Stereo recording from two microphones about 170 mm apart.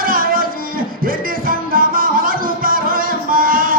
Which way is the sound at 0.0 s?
60° right (ahead or behind).